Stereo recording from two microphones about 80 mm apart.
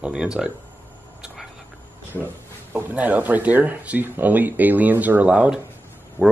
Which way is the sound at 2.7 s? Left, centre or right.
Centre.